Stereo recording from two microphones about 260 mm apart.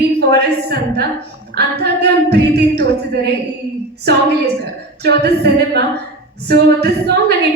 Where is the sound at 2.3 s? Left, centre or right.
Right.